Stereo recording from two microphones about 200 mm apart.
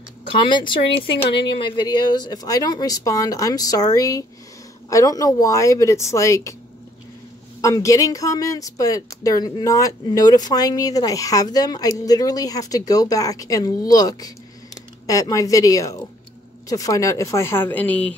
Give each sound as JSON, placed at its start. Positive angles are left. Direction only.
{"t": 0.4, "sound": "speech", "side_deg": 25}
{"t": 7.6, "sound": "speech", "side_deg": 15}